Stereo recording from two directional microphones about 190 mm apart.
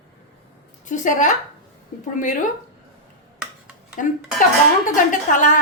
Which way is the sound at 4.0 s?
45° left (ahead or behind).